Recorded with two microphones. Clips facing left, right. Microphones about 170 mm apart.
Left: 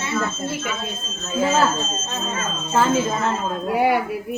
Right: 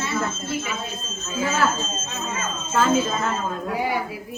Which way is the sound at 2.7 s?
25° left (ahead or behind).